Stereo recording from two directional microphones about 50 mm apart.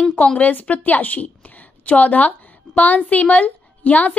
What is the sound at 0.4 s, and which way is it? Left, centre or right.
A woman's voice, left.